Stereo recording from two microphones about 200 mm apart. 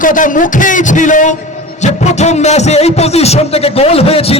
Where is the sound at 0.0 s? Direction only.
40° left (ahead or behind).